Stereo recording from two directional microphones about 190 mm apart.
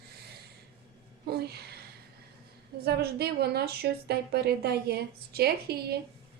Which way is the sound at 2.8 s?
55° right (ahead or behind).